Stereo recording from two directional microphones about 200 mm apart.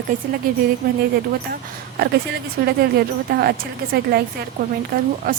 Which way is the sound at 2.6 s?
55° right (ahead or behind).